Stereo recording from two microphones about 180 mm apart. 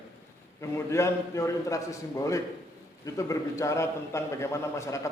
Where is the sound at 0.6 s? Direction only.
15° left (ahead or behind).